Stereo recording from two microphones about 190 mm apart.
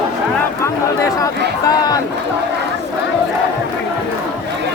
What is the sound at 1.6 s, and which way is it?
Run, 20° left (ahead or behind).